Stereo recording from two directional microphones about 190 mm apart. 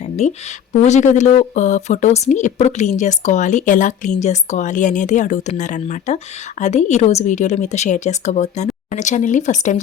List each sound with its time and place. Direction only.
0.2 s speech: 35° left (ahead or behind)